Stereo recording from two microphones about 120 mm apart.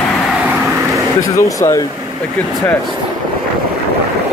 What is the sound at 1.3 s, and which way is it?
Speech, 25° left (ahead or behind).